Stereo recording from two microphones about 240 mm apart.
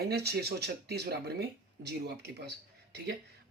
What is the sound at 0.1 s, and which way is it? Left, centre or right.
Speech, right.